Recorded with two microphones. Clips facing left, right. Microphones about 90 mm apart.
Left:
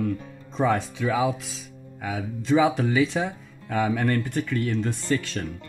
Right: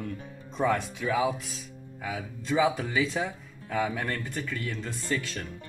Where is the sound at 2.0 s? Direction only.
70° left (ahead or behind).